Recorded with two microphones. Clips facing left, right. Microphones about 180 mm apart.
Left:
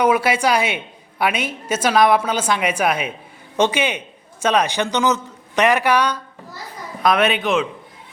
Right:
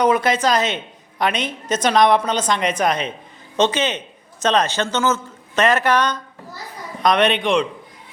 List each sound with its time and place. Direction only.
0.0 s a woman's voice: 10° left (ahead or behind)